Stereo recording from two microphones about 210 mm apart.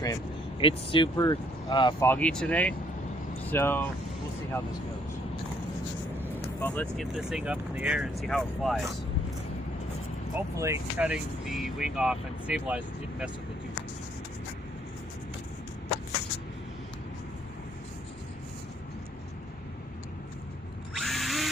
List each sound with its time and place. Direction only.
0.6 s speech: 25° left (ahead or behind)
2.0 s speech: 5° left (ahead or behind)
6.6 s speech: 10° left (ahead or behind)
10.3 s speech: 10° right (ahead or behind)
20.9 s drill: centre (ahead or behind)